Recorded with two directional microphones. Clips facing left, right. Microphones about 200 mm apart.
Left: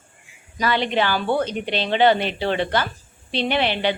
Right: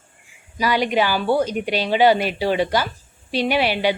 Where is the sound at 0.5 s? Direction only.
10° right (ahead or behind).